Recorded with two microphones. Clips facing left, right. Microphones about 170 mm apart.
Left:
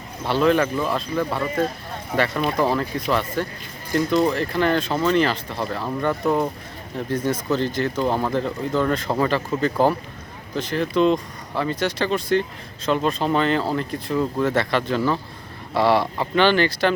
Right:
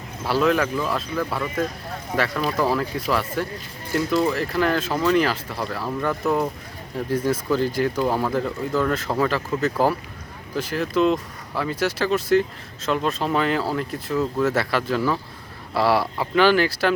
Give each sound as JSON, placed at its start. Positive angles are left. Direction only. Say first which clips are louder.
{"t": 0.3, "sound": "speech", "louder": "left 2 dB", "side_deg": -5}
{"t": 1.4, "sound": "speech", "louder": "left 2 dB", "side_deg": 30}
{"t": 2.1, "sound": "speech", "louder": "left 2 dB", "side_deg": 0}